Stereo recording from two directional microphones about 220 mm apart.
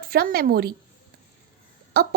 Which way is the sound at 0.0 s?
45° right (ahead or behind).